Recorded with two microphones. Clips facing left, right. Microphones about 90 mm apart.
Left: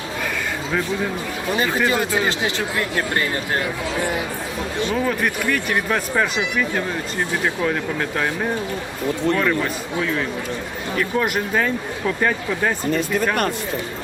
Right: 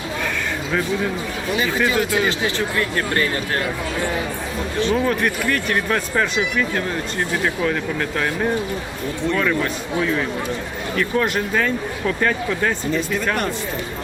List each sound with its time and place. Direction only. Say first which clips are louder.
2.0 s speech: right 1 dB; 25° left (ahead or behind)
5.0 s speech: right 1 dB; 10° left (ahead or behind)
10.9 s speech: right 1 dB; 10° left (ahead or behind)